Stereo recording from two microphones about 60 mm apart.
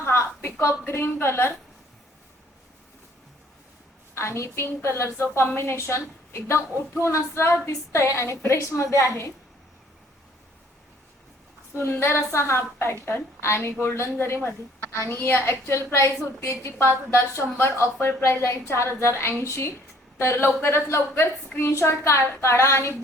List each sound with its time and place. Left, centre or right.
0.0 s a sound: left
0.6 s a woman's voice: left
4.1 s a woman's voice: left
7.7 s a woman's voice: left
11.8 s a woman's voice: left
16.5 s a woman's voice: left
17.1 s a woman's voice: left